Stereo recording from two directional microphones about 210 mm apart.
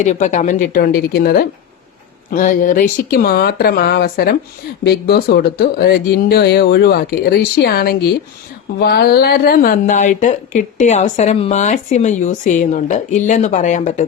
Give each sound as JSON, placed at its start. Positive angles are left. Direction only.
{"t": 0.0, "sound": "speech", "side_deg": 35}